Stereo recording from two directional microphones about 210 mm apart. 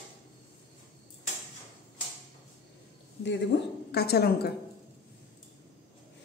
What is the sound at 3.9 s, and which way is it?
Speech, 50° left (ahead or behind).